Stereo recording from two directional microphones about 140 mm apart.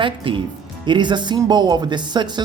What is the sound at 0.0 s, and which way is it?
Speech, 35° right (ahead or behind).